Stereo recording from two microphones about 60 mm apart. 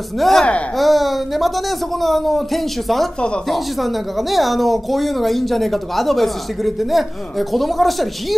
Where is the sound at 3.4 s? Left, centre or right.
Centre.